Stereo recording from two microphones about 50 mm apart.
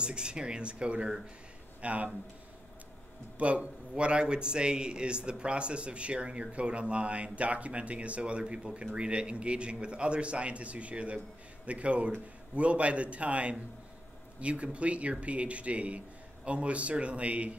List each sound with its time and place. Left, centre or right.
0.0 s a man's voice: centre
3.3 s a man's voice: right